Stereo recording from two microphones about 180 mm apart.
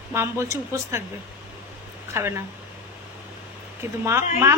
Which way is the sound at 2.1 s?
15° right (ahead or behind).